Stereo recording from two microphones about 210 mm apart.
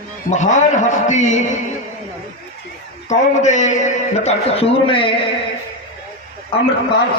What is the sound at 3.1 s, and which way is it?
A man's voice, 35° left (ahead or behind).